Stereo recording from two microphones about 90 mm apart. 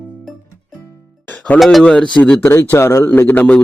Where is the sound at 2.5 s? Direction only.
30° left (ahead or behind).